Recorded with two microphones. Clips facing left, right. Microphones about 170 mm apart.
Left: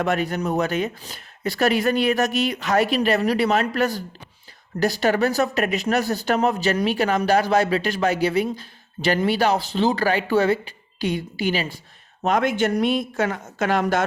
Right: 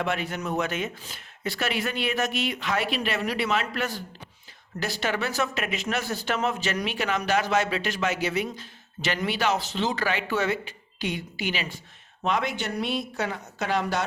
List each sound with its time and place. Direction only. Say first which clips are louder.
0.0 s speech: left 6 dB; 40° left (ahead or behind)
12.2 s speech: left 7 dB; 50° left (ahead or behind)